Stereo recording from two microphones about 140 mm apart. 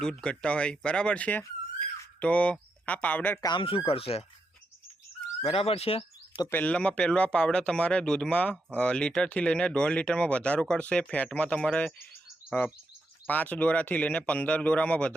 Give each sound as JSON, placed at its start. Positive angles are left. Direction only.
{"t": 0.0, "sound": "speech", "side_deg": 5}
{"t": 3.4, "sound": "speech", "side_deg": 35}
{"t": 5.4, "sound": "speech", "side_deg": 45}
{"t": 6.5, "sound": "speech", "side_deg": 10}
{"t": 13.2, "sound": "speech", "side_deg": 10}